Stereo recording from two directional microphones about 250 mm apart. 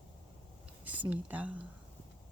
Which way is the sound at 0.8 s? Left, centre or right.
Centre.